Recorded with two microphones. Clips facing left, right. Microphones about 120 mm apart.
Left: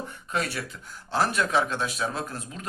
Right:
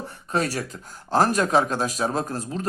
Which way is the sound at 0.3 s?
35° right (ahead or behind).